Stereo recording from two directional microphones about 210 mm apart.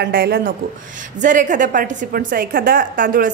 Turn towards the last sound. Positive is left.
turn(degrees=-40)  # may be behind; listen again after turning